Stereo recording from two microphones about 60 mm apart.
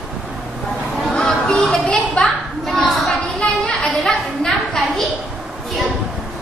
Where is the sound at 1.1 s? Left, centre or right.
Centre.